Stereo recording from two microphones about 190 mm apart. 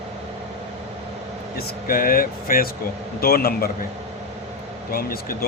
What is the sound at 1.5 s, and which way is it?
Speech, 50° left (ahead or behind).